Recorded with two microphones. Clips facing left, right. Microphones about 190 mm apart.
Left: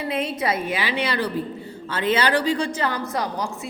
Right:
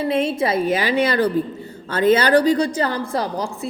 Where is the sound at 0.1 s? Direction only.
25° right (ahead or behind).